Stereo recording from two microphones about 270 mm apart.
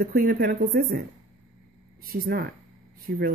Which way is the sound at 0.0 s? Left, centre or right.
Right.